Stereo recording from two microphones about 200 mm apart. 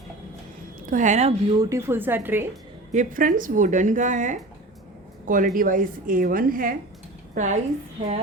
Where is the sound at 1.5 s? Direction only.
15° right (ahead or behind).